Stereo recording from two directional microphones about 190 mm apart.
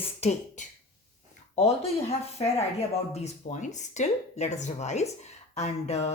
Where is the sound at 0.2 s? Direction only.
40° left (ahead or behind).